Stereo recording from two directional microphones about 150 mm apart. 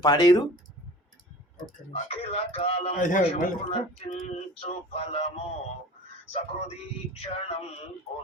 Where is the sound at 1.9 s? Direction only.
45° left (ahead or behind).